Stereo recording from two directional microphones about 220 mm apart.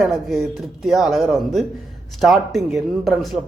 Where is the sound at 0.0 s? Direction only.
Centre (ahead or behind).